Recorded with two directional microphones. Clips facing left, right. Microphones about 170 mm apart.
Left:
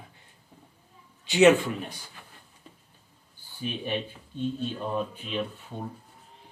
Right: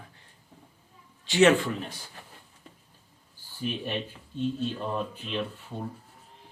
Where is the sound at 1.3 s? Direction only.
15° left (ahead or behind).